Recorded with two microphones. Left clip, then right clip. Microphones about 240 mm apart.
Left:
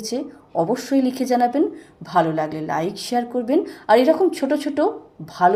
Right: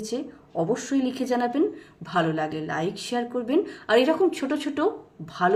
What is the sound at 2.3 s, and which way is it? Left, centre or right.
Speech, left.